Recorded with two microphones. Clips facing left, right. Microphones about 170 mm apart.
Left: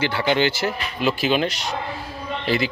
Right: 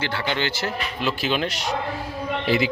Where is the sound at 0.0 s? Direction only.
10° left (ahead or behind).